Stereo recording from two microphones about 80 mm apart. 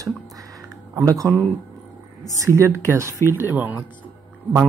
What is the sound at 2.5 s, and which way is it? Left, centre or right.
Speech, right.